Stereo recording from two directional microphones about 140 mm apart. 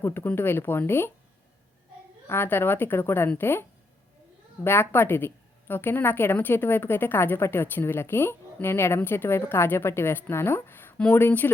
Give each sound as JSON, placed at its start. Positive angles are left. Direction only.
{"t": 0.0, "sound": "a woman's voice", "side_deg": 15}
{"t": 2.2, "sound": "a woman's voice", "side_deg": 15}